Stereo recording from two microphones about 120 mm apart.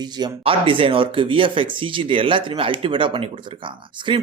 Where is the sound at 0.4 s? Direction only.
50° right (ahead or behind).